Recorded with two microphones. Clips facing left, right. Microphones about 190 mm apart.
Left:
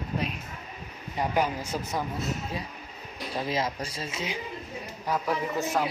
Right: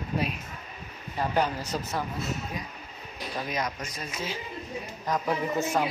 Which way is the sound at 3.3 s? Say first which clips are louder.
Left 3 dB; 25° left (ahead or behind).